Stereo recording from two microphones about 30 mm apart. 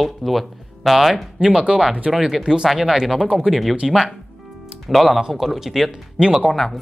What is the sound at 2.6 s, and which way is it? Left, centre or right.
Speech, centre.